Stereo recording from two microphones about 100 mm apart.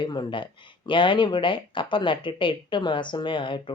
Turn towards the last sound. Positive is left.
turn(degrees=55)  # may be behind; listen again after turning